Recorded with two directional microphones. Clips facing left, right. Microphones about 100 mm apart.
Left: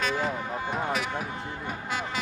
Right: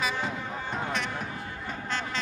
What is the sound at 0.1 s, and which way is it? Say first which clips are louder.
Vehicle: left 3 dB; 5° left (ahead or behind).